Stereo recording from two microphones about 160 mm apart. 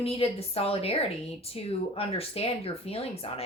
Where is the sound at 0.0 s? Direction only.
40° left (ahead or behind).